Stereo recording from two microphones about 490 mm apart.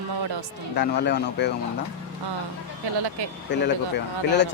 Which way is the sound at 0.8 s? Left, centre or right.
Centre.